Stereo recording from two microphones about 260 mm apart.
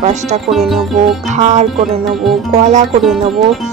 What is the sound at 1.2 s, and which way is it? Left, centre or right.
Speech, right.